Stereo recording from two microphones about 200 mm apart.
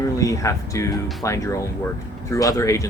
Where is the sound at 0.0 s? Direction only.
15° left (ahead or behind).